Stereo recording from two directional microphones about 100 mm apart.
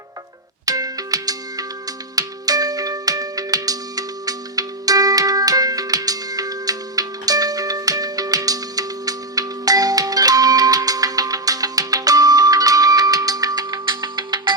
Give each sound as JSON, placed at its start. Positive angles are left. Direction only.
{"t": 0.6, "sound": "music", "side_deg": -35}